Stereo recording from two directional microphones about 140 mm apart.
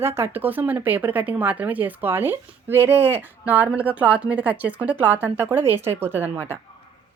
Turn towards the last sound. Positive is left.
turn(degrees=-15)  # may be behind; listen again after turning